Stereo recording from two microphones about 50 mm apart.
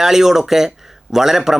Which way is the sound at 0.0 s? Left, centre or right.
Centre.